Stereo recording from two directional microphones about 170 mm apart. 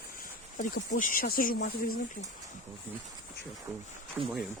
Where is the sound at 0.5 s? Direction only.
50° left (ahead or behind).